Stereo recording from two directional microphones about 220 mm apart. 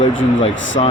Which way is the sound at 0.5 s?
60° left (ahead or behind).